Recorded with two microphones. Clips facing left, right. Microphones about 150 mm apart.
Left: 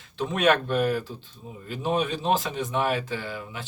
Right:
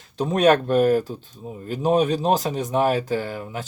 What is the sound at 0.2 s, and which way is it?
Speech, 40° right (ahead or behind).